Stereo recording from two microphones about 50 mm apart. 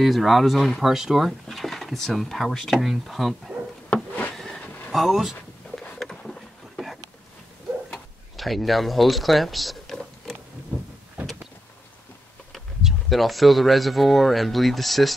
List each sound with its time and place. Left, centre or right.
0.0 s speech: centre
4.3 s train: centre
4.6 s vehicle: left
4.9 s speech: centre
5.9 s a sound: centre
7.9 s speech: centre
9.8 s a sound: centre
12.5 s speech: centre